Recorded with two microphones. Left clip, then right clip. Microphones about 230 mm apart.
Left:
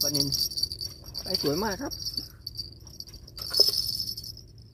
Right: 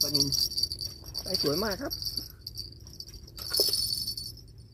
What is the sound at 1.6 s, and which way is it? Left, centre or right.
Insect, left.